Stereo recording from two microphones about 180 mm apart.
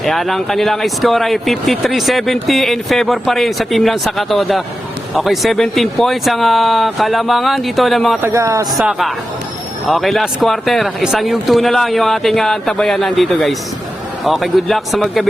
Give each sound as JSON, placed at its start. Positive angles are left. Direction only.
{"t": 0.0, "sound": "speech", "side_deg": 0}
{"t": 8.2, "sound": "speech", "side_deg": -15}
{"t": 8.7, "sound": "speech", "side_deg": 0}